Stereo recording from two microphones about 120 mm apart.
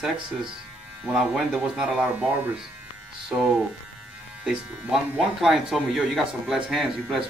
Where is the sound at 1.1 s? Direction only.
5° right (ahead or behind).